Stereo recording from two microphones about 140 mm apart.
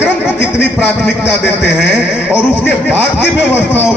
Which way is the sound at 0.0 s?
15° left (ahead or behind).